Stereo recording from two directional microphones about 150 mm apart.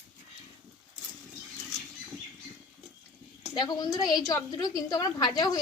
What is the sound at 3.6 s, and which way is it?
A woman's voice, 25° left (ahead or behind).